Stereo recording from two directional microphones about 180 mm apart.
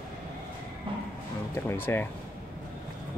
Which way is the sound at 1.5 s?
15° left (ahead or behind).